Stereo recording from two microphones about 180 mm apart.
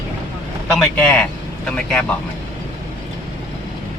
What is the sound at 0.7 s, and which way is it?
Speech, 5° left (ahead or behind).